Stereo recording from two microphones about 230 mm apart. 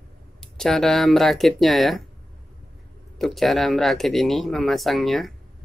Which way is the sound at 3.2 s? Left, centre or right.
Centre.